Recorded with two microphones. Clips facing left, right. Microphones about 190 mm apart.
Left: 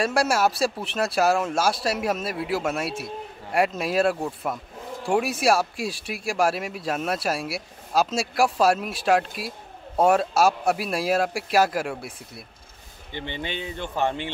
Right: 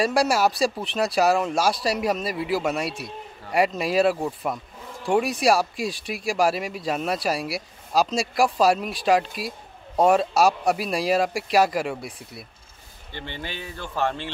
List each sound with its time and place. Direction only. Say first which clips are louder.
0.0 s speech: right 1 dB; centre (ahead or behind)
13.1 s speech: left 3 dB; 20° left (ahead or behind)